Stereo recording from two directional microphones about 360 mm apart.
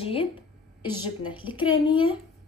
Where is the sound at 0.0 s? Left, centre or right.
Centre.